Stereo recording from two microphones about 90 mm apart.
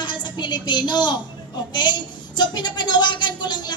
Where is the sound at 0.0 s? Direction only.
60° left (ahead or behind).